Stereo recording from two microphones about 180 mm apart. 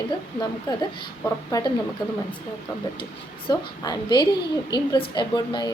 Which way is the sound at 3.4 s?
25° left (ahead or behind).